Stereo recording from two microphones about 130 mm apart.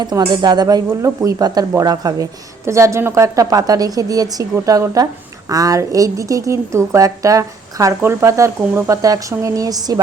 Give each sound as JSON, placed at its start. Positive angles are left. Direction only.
{"t": 0.0, "sound": "a woman's voice", "side_deg": -35}